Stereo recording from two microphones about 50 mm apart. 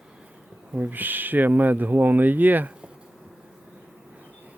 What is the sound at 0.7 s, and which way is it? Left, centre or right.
Speech, right.